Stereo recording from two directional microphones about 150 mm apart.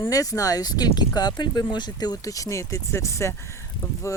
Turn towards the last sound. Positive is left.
turn(degrees=20)  # may be behind; listen again after turning